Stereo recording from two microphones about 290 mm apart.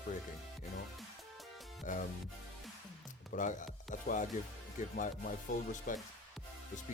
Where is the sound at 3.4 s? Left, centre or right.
Left.